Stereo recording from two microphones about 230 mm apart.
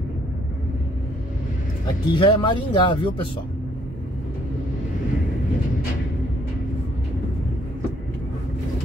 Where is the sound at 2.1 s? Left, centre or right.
Left.